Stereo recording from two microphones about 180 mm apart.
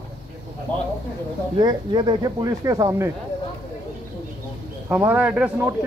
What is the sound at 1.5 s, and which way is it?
Speech, 25° right (ahead or behind).